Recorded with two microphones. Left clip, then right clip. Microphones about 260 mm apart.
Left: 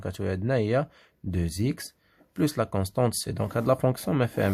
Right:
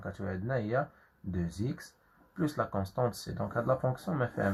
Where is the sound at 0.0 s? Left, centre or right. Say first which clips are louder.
Left 8 dB; left.